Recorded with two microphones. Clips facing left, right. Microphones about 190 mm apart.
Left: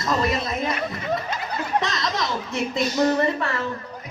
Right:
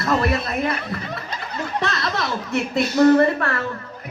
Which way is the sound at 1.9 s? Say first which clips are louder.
Right 1 dB; 60° right (ahead or behind).